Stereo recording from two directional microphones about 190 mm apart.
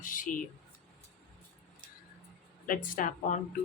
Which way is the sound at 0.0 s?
45° left (ahead or behind).